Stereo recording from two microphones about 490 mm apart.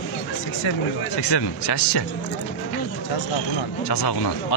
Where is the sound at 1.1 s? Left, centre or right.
Left.